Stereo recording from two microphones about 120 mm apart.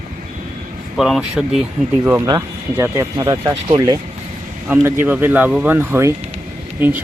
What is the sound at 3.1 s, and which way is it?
Speech, 35° right (ahead or behind).